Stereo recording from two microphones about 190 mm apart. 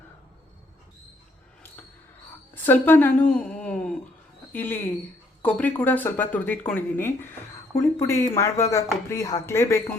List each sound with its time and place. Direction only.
2.6 s speech: 10° left (ahead or behind)
3.3 s a sound: 5° left (ahead or behind)
4.5 s speech: 10° left (ahead or behind)